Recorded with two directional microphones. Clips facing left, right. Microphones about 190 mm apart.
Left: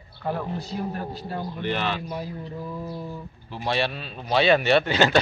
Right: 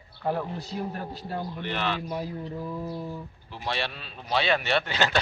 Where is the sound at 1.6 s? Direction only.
10° left (ahead or behind).